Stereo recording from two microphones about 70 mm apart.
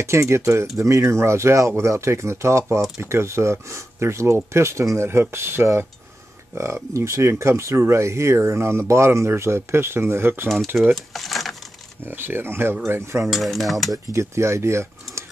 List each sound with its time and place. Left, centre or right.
0.0 s speech: right
10.7 s stir: centre
11.1 s speech: centre
12.0 s speech: right
13.2 s stir: centre
13.9 s speech: right